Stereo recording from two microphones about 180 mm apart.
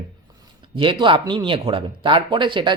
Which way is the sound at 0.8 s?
25° right (ahead or behind).